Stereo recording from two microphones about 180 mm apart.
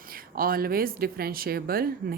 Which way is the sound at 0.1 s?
55° right (ahead or behind).